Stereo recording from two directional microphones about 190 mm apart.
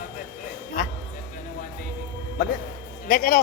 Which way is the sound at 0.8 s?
50° left (ahead or behind).